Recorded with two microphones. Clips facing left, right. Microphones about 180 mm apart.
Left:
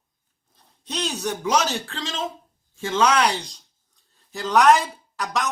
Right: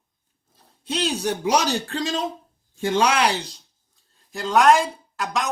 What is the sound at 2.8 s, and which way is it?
Speech, 10° right (ahead or behind).